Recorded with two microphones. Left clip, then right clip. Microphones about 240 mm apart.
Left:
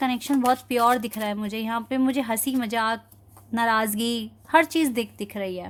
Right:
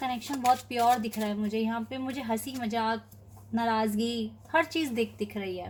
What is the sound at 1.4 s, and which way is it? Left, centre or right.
A woman's voice, left.